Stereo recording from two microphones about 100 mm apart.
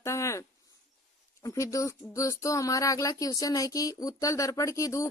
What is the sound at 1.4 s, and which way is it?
Speech, 35° left (ahead or behind).